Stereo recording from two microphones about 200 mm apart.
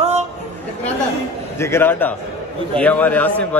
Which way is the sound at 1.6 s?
10° left (ahead or behind).